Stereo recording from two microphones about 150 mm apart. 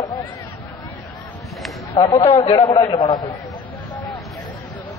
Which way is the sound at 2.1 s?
45° left (ahead or behind).